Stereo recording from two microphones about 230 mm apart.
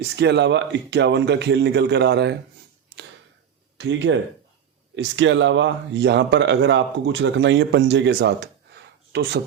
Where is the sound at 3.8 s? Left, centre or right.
Right.